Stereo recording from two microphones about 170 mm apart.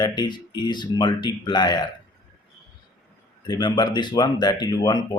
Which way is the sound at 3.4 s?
25° left (ahead or behind).